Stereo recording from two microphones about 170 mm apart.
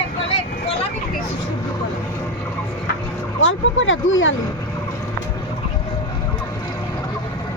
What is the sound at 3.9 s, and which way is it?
Speech, 90° left.